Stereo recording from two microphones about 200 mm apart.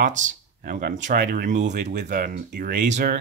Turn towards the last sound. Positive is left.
turn(degrees=-40)  # may be behind; listen again after turning